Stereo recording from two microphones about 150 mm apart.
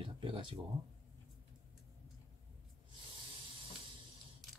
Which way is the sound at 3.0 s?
35° right (ahead or behind).